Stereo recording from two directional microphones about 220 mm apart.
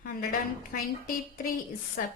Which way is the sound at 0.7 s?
40° left (ahead or behind).